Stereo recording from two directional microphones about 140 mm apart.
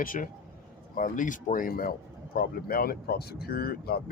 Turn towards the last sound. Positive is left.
turn(degrees=90)